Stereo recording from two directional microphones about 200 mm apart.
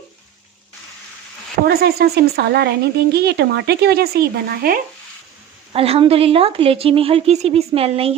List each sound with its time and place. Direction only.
1.6 s speech: 50° right (ahead or behind)
5.7 s a woman's voice: 30° right (ahead or behind)